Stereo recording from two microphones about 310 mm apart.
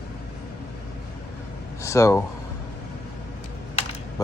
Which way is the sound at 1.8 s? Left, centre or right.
Centre.